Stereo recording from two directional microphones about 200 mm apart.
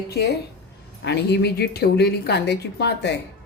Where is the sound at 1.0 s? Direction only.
55° left (ahead or behind).